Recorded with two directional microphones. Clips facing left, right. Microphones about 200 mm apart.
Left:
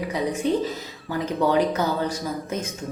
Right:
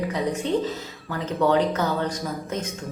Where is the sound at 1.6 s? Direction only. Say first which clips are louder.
Left 1 dB; 10° left (ahead or behind).